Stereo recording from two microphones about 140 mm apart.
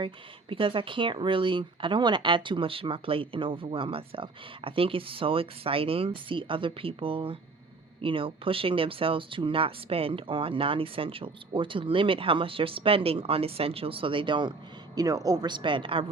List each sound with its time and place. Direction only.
0.0 s speech: 40° right (ahead or behind)